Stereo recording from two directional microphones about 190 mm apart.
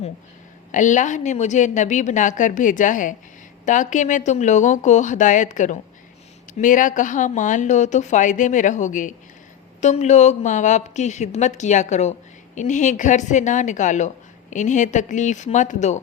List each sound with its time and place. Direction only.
0.7 s a woman's voice: 40° left (ahead or behind)